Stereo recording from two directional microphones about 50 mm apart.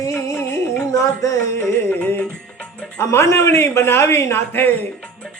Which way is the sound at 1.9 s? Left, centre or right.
Left.